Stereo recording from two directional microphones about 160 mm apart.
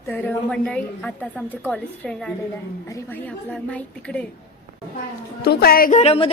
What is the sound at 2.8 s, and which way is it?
Speech, 20° left (ahead or behind).